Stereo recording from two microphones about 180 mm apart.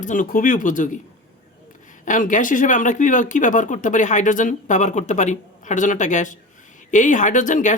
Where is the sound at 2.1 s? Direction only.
45° left (ahead or behind).